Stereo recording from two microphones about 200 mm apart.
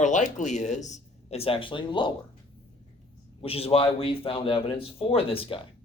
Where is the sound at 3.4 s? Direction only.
30° left (ahead or behind).